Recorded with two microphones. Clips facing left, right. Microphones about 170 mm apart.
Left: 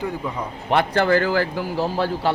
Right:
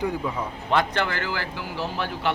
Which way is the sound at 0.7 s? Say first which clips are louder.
Left 6 dB; 35° left (ahead or behind).